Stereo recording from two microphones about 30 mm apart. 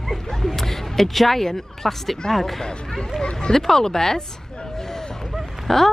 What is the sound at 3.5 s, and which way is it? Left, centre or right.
Speech, centre.